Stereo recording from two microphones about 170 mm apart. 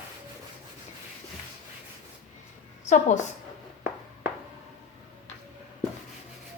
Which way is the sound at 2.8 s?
45° left (ahead or behind).